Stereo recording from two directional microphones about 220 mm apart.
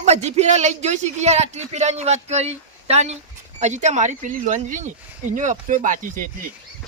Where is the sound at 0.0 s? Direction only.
30° right (ahead or behind).